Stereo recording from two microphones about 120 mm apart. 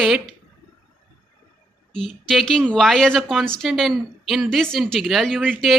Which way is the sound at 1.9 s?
5° left (ahead or behind).